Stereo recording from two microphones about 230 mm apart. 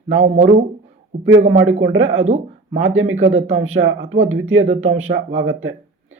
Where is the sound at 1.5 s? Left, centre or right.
Right.